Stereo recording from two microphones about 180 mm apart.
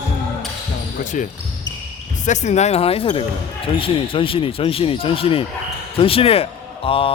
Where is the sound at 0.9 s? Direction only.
45° left (ahead or behind).